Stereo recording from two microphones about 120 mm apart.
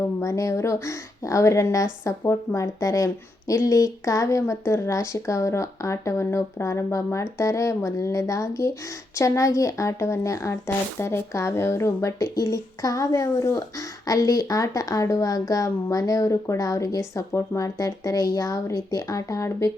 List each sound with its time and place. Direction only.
0.2 s speech: 25° left (ahead or behind)